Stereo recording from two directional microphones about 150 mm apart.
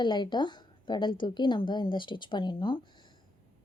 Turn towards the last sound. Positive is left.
turn(degrees=30)  # may be behind; listen again after turning